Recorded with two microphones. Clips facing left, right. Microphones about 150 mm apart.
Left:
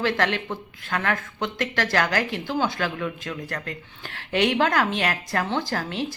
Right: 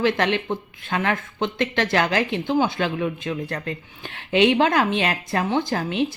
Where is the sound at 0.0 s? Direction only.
20° right (ahead or behind).